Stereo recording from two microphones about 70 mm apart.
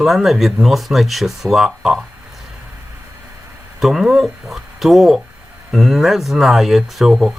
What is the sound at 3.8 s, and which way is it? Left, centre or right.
Speech, centre.